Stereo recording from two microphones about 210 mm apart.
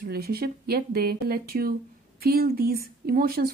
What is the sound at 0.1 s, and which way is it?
Speech, 45° right (ahead or behind).